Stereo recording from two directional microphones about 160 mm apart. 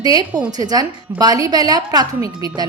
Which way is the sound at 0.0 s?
25° right (ahead or behind).